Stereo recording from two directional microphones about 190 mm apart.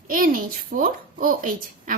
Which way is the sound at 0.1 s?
45° right (ahead or behind).